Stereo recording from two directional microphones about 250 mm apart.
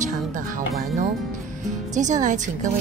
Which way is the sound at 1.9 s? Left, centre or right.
Right.